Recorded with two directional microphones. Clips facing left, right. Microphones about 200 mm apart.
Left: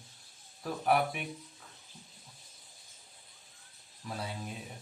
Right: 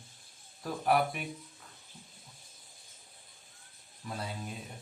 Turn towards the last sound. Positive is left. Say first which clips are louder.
# even
turn(degrees=0)  # may be behind; listen again after turning